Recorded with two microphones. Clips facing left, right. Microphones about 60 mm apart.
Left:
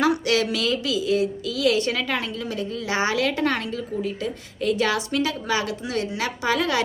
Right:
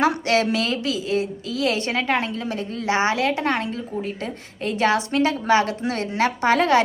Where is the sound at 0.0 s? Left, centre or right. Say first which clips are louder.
Right 1 dB; right.